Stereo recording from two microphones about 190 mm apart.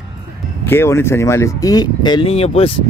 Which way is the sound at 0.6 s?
10° left (ahead or behind).